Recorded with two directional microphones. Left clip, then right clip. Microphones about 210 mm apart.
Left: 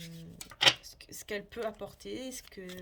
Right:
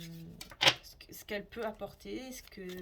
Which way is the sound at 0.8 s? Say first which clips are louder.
Left 2 dB; 40° left (ahead or behind).